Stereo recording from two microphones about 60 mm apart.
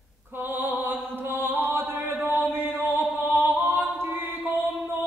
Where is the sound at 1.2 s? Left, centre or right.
Right.